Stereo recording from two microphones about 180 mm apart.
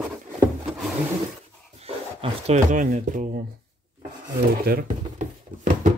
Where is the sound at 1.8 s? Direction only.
35° right (ahead or behind).